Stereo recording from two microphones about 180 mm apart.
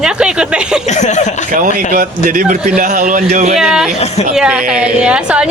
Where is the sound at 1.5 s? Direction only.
50° right (ahead or behind).